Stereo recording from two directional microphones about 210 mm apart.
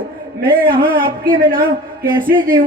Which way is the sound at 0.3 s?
45° right (ahead or behind).